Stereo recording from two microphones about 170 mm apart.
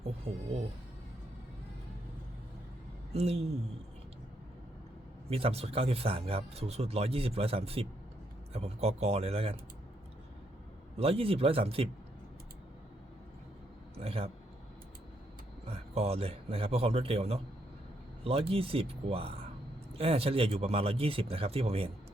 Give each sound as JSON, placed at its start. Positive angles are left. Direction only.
{"t": 0.0, "sound": "music", "side_deg": -35}
{"t": 3.1, "sound": "speech", "side_deg": -35}
{"t": 5.3, "sound": "speech", "side_deg": -35}
{"t": 10.9, "sound": "speech", "side_deg": -35}
{"t": 13.9, "sound": "a man's voice", "side_deg": -35}
{"t": 15.6, "sound": "speech", "side_deg": -35}